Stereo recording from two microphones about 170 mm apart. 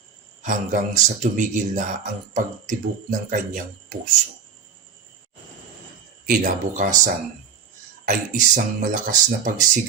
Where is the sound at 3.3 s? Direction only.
50° right (ahead or behind).